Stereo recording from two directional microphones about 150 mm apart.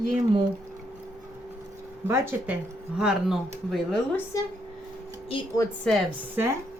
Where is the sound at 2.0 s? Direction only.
15° right (ahead or behind).